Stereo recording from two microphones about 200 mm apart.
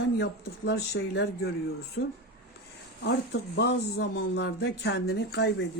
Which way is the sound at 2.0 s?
90° left.